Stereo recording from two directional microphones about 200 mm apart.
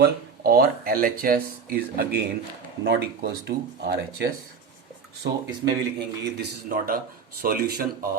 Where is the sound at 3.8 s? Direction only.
55° right (ahead or behind).